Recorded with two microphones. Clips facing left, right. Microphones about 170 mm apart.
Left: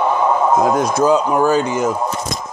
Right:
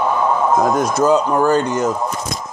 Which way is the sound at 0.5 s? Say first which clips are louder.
Left 1 dB; 5° left (ahead or behind).